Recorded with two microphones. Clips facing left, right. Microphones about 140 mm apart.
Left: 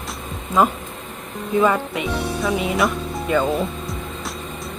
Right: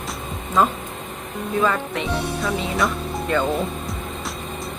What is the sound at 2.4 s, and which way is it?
Speech, centre (ahead or behind).